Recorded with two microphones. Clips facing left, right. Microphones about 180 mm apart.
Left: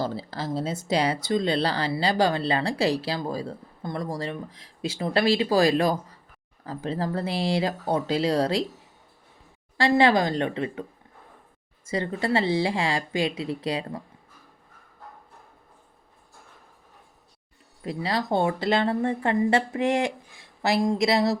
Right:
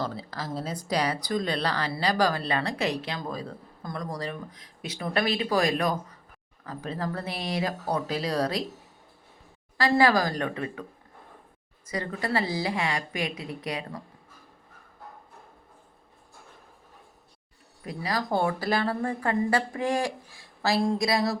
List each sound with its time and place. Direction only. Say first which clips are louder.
0.0 s speech: left 4 dB; 30° left (ahead or behind)
9.9 s speech: left 2 dB; 25° left (ahead or behind)
11.9 s speech: left 4 dB; 25° left (ahead or behind)
17.8 s speech: left 3 dB; 25° left (ahead or behind)